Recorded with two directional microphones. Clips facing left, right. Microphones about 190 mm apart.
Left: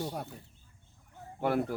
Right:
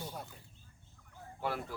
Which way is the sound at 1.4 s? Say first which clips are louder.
Left 8 dB; 50° left (ahead or behind).